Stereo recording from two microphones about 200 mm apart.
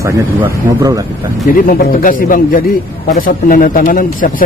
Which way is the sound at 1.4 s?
45° left (ahead or behind).